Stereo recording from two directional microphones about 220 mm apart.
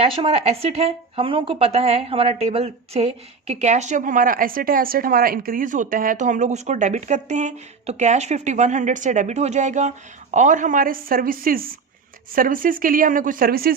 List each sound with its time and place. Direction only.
0.0 s speech: 25° right (ahead or behind); by 13.7 s 45° right (ahead or behind)